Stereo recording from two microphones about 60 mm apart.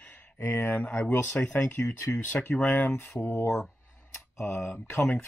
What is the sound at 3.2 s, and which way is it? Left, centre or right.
Speech, left.